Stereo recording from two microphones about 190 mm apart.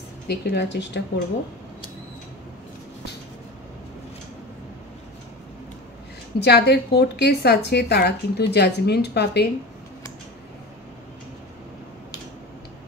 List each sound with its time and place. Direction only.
0.3 s a woman's voice: 60° left (ahead or behind)
6.4 s a woman's voice: 60° left (ahead or behind)